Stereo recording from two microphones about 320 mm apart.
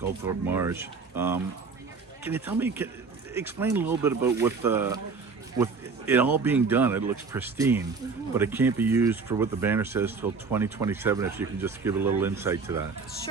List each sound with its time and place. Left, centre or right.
0.3 s speech: centre
6.1 s speech: centre